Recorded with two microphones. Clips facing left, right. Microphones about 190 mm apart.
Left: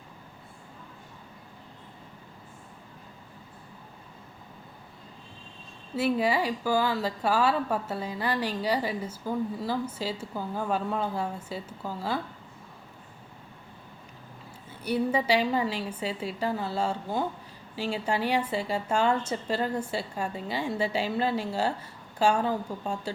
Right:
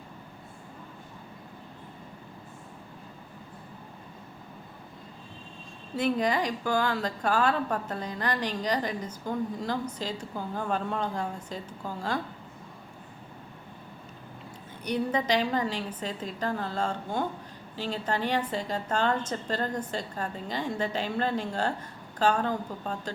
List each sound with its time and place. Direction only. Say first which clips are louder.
6.0 s a woman's voice: left 1 dB; 5° left (ahead or behind)
14.8 s a woman's voice: left 2 dB; 5° left (ahead or behind)